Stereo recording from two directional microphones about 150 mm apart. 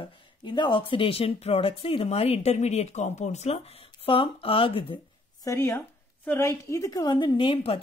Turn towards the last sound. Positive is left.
turn(degrees=40)  # may be behind; listen again after turning